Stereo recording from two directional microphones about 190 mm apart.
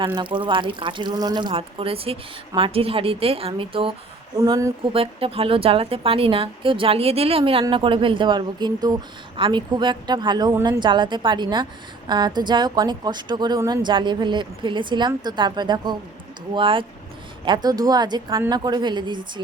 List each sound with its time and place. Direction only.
0.0 s a woman's voice: 25° right (ahead or behind)
4.4 s speech: 15° right (ahead or behind)
4.8 s a woman's voice: 30° right (ahead or behind)